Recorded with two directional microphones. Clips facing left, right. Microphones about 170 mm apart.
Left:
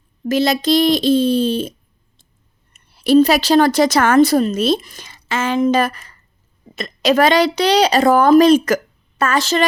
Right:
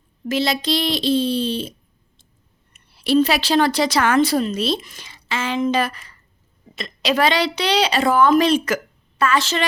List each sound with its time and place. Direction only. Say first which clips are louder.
0.3 s a woman's voice: left 5 dB; 45° left (ahead or behind)
2.7 s a woman's voice: left 5 dB; 45° left (ahead or behind)